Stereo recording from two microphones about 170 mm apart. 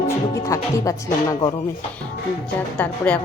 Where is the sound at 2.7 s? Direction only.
10° left (ahead or behind).